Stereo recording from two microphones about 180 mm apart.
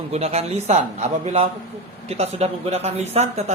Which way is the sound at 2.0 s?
35° right (ahead or behind).